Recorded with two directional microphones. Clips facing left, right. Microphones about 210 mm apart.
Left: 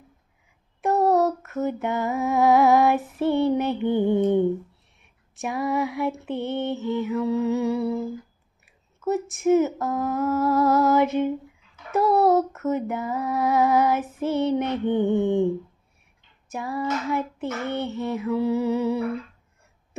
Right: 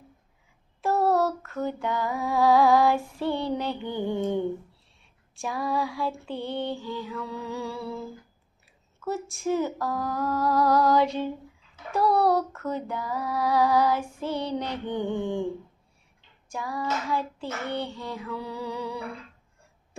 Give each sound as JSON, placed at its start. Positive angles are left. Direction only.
{"t": 0.7, "sound": "a sound", "side_deg": 15}
{"t": 3.2, "sound": "female singing", "side_deg": 20}
{"t": 12.1, "sound": "speech", "side_deg": 0}
{"t": 12.4, "sound": "female singing", "side_deg": 20}
{"t": 16.5, "sound": "female singing", "side_deg": 25}